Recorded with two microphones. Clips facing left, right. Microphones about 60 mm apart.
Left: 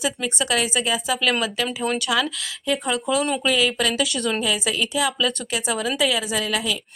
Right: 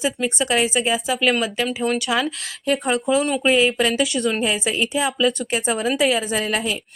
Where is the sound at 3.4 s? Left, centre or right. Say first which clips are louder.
Right 4 dB; right.